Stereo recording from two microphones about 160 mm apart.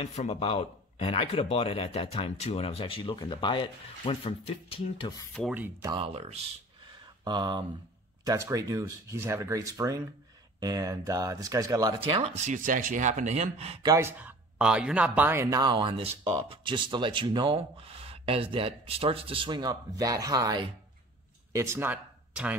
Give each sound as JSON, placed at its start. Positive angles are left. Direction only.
{"t": 0.0, "sound": "speech", "side_deg": 40}
{"t": 5.5, "sound": "speech", "side_deg": -10}
{"t": 5.9, "sound": "speech", "side_deg": -35}
{"t": 7.2, "sound": "speech", "side_deg": -25}
{"t": 12.0, "sound": "speech", "side_deg": -35}
{"t": 12.4, "sound": "speech", "side_deg": -55}
{"t": 13.8, "sound": "speech", "side_deg": -15}
{"t": 15.6, "sound": "speech", "side_deg": -30}